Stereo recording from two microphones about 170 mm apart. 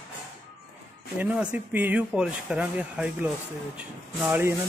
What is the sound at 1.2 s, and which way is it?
Speech, 10° right (ahead or behind).